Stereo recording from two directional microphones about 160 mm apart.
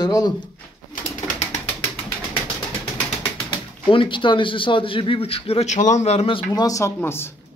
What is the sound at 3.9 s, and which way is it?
A man's voice, 30° left (ahead or behind).